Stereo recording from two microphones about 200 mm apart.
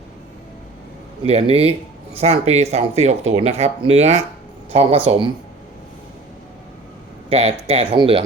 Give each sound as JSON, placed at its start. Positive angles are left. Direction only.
{"t": 1.2, "sound": "speech", "side_deg": -30}
{"t": 7.3, "sound": "speech", "side_deg": -30}